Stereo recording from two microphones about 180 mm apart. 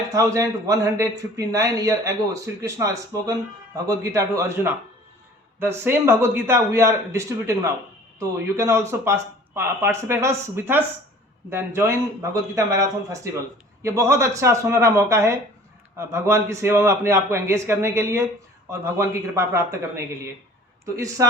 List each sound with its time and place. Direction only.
0.1 s a man's voice: 20° right (ahead or behind)